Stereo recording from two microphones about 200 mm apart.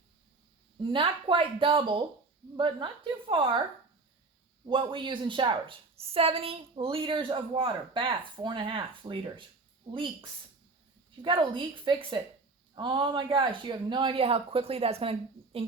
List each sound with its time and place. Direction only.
0.8 s a woman's voice: 25° right (ahead or behind)
4.6 s a woman's voice: 25° right (ahead or behind)